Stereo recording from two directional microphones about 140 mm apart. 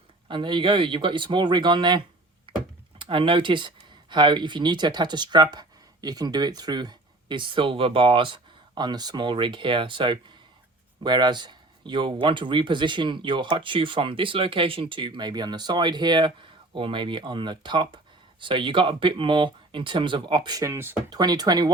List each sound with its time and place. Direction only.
0.3 s speech: 35° right (ahead or behind)
2.5 s computer keyboard: 40° right (ahead or behind)
3.0 s speech: 40° right (ahead or behind); by 20.9 s 20° right (ahead or behind)
21.1 s speech: 30° right (ahead or behind)